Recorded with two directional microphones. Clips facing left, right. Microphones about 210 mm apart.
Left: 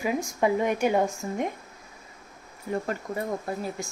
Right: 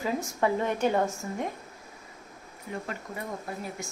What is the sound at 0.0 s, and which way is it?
A woman's voice, 15° left (ahead or behind).